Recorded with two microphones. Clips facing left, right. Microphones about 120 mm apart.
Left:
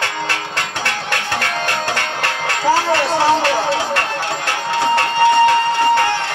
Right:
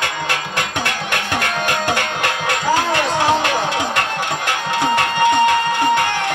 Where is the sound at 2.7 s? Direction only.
15° right (ahead or behind).